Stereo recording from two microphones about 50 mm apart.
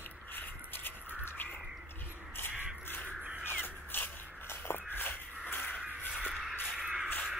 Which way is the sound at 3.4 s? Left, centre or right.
Left.